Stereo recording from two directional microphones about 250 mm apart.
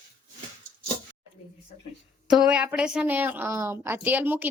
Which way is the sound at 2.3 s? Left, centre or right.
Centre.